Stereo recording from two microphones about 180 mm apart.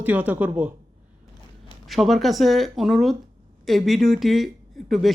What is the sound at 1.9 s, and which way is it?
Speech, centre (ahead or behind).